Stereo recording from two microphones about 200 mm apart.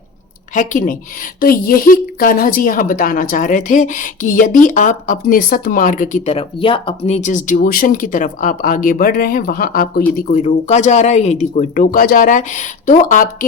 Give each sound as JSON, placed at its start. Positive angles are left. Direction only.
{"t": 0.5, "sound": "speech", "side_deg": 40}
{"t": 7.2, "sound": "speech", "side_deg": 40}